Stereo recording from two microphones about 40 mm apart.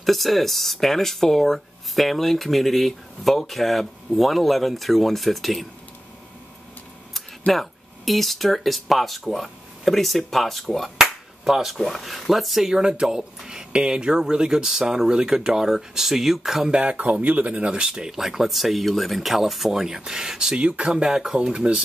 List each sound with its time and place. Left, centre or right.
0.0 s speech: centre
7.5 s speech: centre
11.0 s finger snapping: centre
11.7 s speech: centre
12.7 s speech: right
16.8 s speech: right
17.8 s speech: centre
18.1 s speech: centre
20.5 s speech: right